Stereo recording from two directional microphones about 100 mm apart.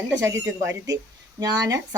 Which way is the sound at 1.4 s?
40° right (ahead or behind).